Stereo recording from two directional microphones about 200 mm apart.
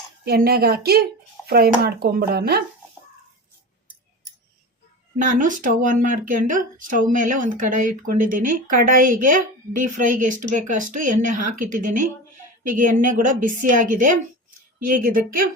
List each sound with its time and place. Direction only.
0.3 s speech: 50° right (ahead or behind)
5.2 s speech: 40° right (ahead or behind)